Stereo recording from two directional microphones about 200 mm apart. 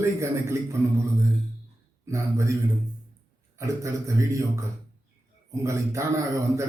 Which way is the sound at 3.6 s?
15° right (ahead or behind).